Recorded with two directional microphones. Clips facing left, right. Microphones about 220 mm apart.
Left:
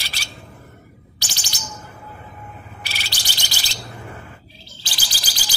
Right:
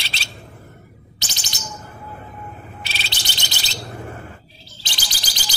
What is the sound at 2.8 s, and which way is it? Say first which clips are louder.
Bird: even; 20° right (ahead or behind).